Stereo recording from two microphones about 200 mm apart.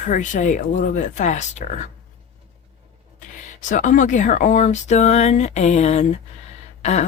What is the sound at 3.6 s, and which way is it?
Speech, 40° left (ahead or behind).